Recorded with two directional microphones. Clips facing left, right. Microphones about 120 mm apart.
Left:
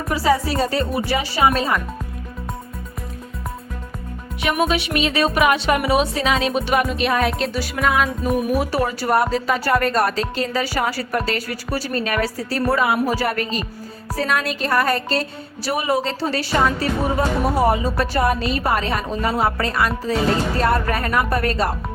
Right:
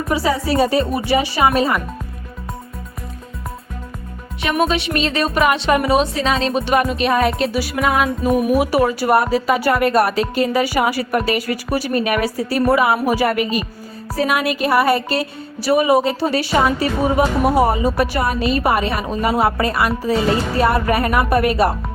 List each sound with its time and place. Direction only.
0.5 s speech: 15° right (ahead or behind)
4.4 s speech: 5° left (ahead or behind); by 21.7 s 10° right (ahead or behind)